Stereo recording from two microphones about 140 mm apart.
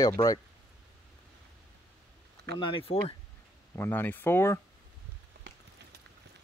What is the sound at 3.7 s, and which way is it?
Speech, 15° left (ahead or behind).